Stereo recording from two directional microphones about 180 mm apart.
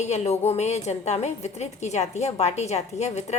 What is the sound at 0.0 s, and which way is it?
A woman's voice, 40° left (ahead or behind).